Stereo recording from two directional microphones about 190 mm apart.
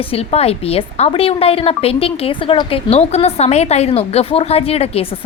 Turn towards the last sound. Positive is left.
turn(degrees=30)  # may be behind; listen again after turning